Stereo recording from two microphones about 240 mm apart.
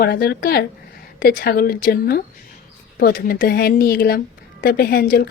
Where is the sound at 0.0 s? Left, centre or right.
Left.